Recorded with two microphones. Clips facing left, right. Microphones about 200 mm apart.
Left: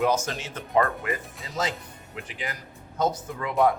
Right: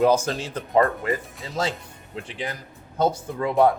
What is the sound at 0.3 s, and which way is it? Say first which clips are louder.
Speech: right 5 dB; 30° right (ahead or behind).